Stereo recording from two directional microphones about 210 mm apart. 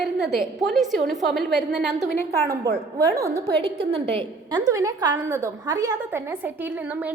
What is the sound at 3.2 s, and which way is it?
Speech, 15° right (ahead or behind).